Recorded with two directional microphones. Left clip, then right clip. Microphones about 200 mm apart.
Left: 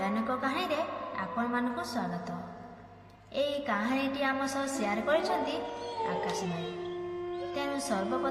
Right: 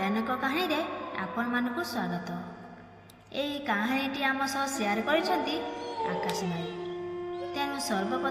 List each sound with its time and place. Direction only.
0.0 s a sound: 15° right (ahead or behind)
3.3 s a woman's voice: 15° right (ahead or behind)
5.6 s howl: centre (ahead or behind)
7.5 s music: 15° right (ahead or behind)